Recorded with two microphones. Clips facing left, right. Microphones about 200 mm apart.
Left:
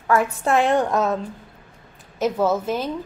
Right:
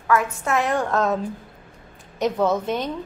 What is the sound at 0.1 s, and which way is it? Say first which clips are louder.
Speech: left 2 dB; 30° left (ahead or behind).